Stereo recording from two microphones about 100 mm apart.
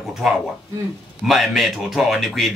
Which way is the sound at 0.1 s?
5° right (ahead or behind).